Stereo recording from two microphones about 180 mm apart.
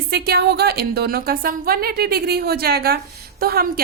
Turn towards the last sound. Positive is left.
turn(degrees=-55)  # may be behind; listen again after turning